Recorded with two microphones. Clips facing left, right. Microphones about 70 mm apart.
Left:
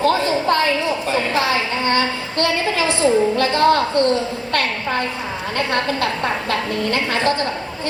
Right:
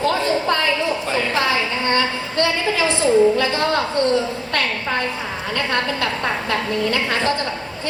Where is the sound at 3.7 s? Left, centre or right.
Centre.